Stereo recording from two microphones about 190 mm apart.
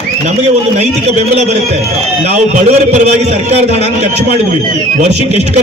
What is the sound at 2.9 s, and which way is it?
A man's voice, 35° right (ahead or behind).